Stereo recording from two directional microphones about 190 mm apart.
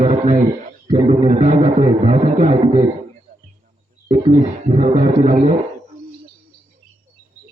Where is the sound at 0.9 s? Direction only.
30° right (ahead or behind).